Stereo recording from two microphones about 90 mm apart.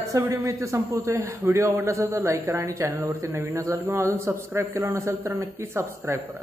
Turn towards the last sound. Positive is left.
turn(degrees=-25)  # may be behind; listen again after turning